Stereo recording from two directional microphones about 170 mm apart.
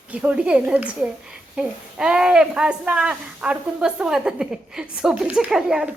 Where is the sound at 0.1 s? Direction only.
5° right (ahead or behind).